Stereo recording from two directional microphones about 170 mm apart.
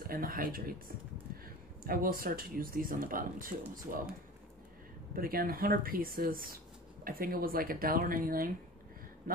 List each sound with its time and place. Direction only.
0.0 s speech: 60° right (ahead or behind)
5.1 s speech: 60° right (ahead or behind)